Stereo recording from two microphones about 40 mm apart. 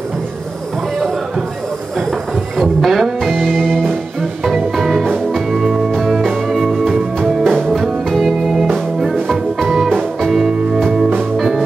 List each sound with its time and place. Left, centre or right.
2.5 s music: centre
3.5 s music: centre
4.7 s music: centre